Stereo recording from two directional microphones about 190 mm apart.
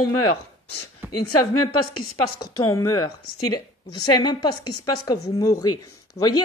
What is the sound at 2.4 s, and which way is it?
Speech, 15° left (ahead or behind).